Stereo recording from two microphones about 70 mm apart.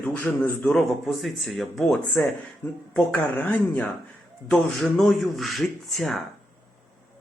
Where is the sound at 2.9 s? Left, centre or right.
Left.